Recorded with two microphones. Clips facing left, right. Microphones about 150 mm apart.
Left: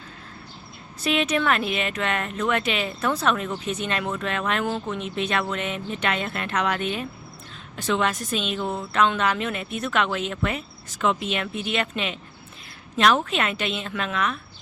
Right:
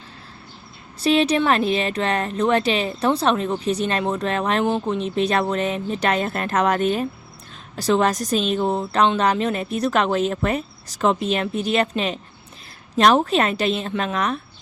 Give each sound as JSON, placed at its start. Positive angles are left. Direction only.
{"t": 0.9, "sound": "speech", "side_deg": -30}